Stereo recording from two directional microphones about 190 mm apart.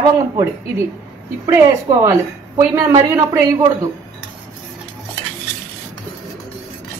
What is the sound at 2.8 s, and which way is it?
A woman's voice, 15° right (ahead or behind).